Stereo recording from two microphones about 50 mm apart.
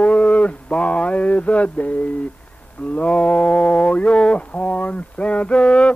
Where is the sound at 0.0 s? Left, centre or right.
Left.